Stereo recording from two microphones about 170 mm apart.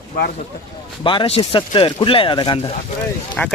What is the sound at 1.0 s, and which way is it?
Speech, 30° left (ahead or behind).